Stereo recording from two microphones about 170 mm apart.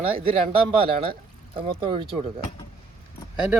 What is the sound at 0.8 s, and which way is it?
Speech, 30° right (ahead or behind).